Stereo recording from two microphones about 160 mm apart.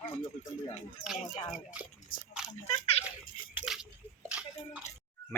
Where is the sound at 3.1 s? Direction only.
10° right (ahead or behind).